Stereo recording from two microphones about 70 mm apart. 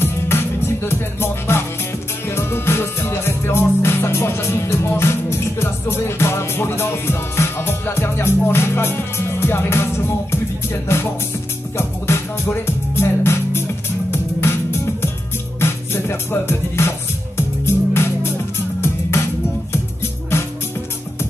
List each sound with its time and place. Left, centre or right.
0.0 s music: left